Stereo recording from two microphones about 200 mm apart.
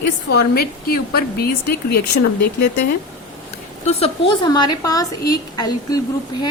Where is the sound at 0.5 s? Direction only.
50° left (ahead or behind).